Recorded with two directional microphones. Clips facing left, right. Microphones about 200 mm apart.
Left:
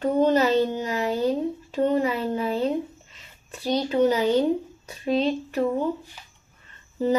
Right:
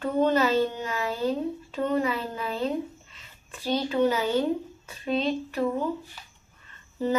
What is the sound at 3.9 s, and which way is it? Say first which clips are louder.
Speech: left 3 dB; 25° left (ahead or behind).